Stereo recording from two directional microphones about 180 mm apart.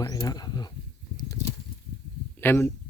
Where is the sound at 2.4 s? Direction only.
10° left (ahead or behind).